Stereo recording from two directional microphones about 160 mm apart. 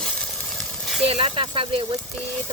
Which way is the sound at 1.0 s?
35° right (ahead or behind).